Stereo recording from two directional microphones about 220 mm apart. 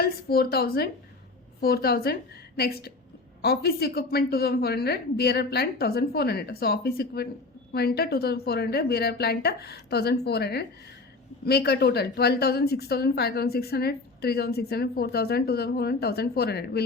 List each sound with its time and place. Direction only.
0.0 s a woman's voice: 45° left (ahead or behind)